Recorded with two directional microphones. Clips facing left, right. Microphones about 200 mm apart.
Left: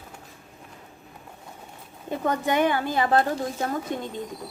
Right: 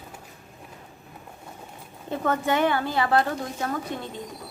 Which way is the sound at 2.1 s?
15° left (ahead or behind).